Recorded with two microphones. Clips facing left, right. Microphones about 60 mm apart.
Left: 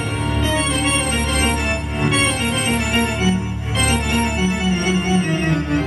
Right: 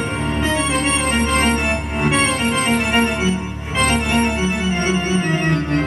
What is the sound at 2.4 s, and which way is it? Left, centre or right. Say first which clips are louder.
Organ: right 2 dB; right.